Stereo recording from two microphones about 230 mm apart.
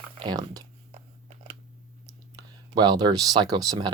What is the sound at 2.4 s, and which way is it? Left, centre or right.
Speech, centre.